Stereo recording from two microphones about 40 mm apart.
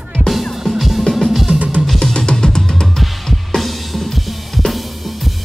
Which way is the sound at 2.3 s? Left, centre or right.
Centre.